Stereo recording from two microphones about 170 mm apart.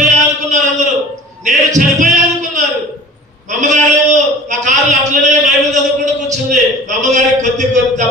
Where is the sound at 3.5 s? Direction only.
45° right (ahead or behind).